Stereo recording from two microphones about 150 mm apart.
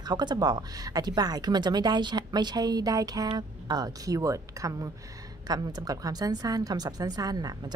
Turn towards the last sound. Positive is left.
turn(degrees=-25)  # may be behind; listen again after turning